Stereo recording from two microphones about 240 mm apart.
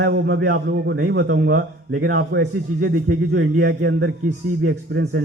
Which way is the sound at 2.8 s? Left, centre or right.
Right.